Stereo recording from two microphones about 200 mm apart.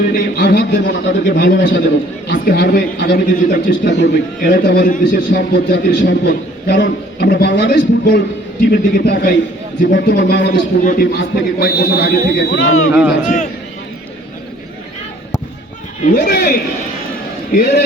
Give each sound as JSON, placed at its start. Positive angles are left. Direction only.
{"t": 0.1, "sound": "a man's voice", "side_deg": 45}
{"t": 2.4, "sound": "a man's voice", "side_deg": 50}
{"t": 12.9, "sound": "a man's voice", "side_deg": -5}
{"t": 13.2, "sound": "a man's voice", "side_deg": 40}
{"t": 16.0, "sound": "a man's voice", "side_deg": 50}